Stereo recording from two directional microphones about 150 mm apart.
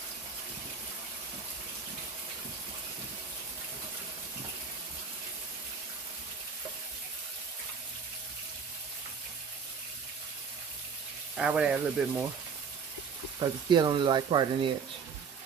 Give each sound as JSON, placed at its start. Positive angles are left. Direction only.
{"t": 11.3, "sound": "speech", "side_deg": -5}
{"t": 13.4, "sound": "speech", "side_deg": -30}